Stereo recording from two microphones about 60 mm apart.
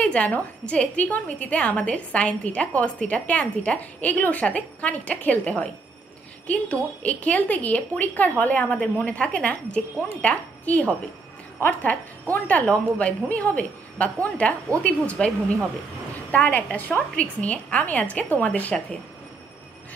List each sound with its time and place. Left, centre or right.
0.0 s a woman's voice: left